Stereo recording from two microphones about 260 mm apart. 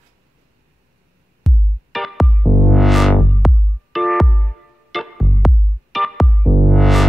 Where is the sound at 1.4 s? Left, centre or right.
Centre.